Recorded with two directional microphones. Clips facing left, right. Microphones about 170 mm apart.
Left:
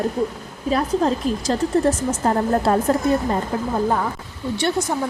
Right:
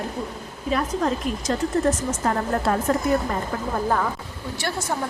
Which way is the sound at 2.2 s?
30° left (ahead or behind).